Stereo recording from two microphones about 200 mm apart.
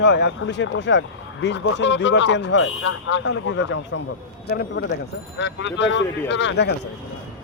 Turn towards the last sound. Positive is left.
turn(degrees=65)  # may be behind; listen again after turning